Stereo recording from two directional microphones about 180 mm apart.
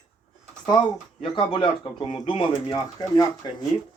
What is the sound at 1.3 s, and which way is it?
A man's voice, 30° left (ahead or behind).